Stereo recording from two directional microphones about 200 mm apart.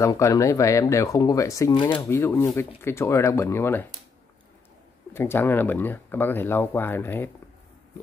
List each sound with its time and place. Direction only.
0.0 s speech: 15° left (ahead or behind)
5.1 s speech: 10° left (ahead or behind)